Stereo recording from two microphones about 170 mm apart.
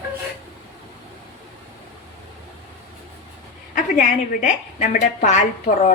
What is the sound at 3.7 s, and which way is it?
A woman's voice, 50° left (ahead or behind).